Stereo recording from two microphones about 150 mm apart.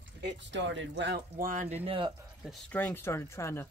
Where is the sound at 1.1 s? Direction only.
65° right (ahead or behind).